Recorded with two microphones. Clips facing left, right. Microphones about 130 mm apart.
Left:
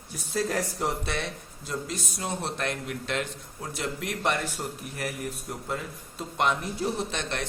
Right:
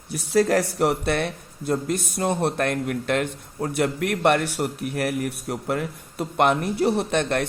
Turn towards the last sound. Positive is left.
turn(degrees=-55)  # may be behind; listen again after turning